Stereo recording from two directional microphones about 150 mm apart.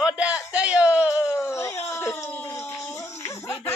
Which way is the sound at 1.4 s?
20° left (ahead or behind).